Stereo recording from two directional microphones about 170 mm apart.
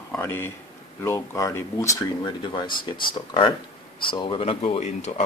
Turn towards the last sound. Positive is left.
turn(degrees=40)  # may be behind; listen again after turning